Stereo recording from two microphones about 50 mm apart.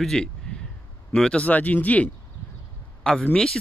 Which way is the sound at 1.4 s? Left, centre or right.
Left.